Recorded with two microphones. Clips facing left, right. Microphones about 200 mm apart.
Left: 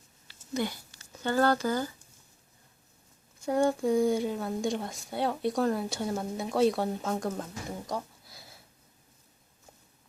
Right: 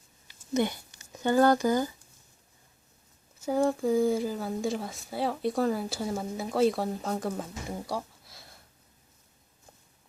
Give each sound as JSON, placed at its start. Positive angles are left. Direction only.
{"t": 0.3, "sound": "speech", "side_deg": -20}
{"t": 3.4, "sound": "speech", "side_deg": 0}
{"t": 7.9, "sound": "a sound", "side_deg": -5}